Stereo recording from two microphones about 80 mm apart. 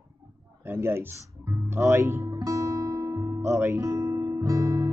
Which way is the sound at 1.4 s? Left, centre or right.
Right.